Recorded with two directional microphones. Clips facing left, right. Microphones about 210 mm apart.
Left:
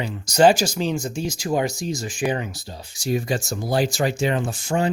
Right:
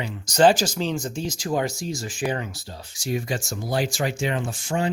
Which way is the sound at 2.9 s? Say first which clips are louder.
Left 4 dB; 35° left (ahead or behind).